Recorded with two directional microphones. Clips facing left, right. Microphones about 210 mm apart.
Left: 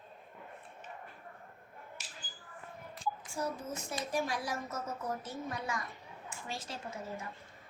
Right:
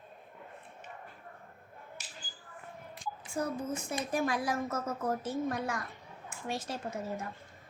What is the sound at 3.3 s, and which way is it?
A woman's voice, 55° right (ahead or behind).